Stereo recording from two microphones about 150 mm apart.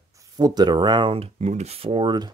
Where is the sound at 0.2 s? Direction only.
25° right (ahead or behind).